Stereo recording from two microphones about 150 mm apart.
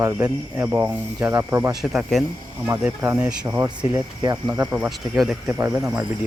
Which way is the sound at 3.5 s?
20° right (ahead or behind).